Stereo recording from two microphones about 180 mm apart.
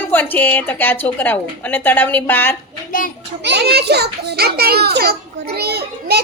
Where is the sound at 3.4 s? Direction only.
65° right (ahead or behind).